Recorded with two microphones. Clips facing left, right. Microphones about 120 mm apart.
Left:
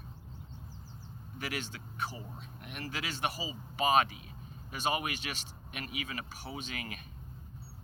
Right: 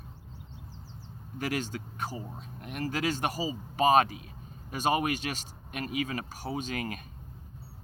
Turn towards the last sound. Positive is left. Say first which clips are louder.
# right 8 dB
turn(degrees=-40)  # may be behind; listen again after turning